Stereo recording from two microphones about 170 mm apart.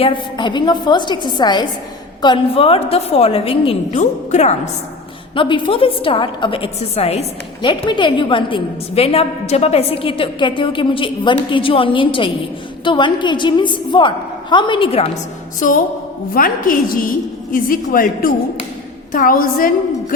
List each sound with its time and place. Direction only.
0.0 s a woman's voice: 30° left (ahead or behind)
5.3 s a woman's voice: 30° left (ahead or behind)
15.6 s music: 50° left (ahead or behind)
16.3 s a woman's voice: 55° left (ahead or behind)